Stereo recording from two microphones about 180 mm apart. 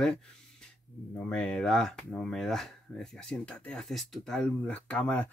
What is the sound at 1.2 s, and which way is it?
Speech, 5° left (ahead or behind).